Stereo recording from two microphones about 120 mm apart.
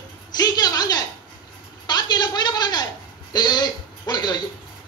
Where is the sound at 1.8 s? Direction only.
35° left (ahead or behind).